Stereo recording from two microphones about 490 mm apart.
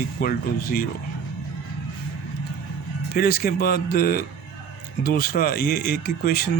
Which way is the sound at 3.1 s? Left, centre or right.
Centre.